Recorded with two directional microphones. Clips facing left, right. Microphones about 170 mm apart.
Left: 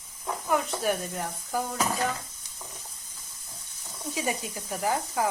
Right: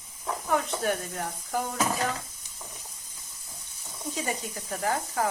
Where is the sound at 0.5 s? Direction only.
5° left (ahead or behind).